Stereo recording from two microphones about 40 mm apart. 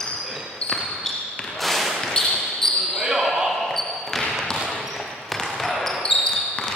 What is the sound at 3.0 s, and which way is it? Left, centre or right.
Basketball bounce, centre.